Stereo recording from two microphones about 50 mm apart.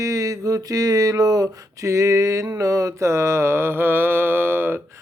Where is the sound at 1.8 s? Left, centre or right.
Right.